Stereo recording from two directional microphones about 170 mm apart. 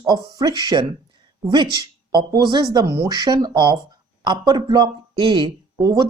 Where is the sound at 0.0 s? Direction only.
20° right (ahead or behind).